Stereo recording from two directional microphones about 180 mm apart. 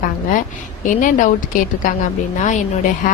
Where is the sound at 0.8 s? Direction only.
45° left (ahead or behind).